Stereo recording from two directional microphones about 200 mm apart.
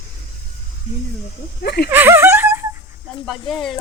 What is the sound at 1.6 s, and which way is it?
Speech, 55° left (ahead or behind).